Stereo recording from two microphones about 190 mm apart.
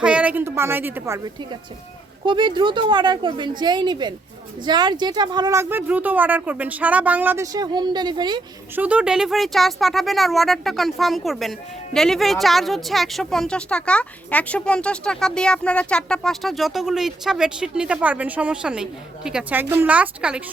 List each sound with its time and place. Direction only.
0.0 s speech: 5° right (ahead or behind)
2.2 s a woman's voice: 25° right (ahead or behind)
8.7 s a woman's voice: 5° right (ahead or behind)